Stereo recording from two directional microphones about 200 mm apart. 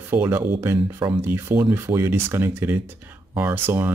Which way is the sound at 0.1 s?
10° right (ahead or behind).